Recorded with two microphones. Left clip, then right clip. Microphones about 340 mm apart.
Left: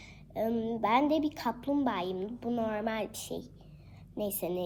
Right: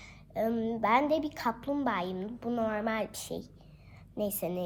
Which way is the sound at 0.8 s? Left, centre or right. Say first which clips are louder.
Right 1 dB; right.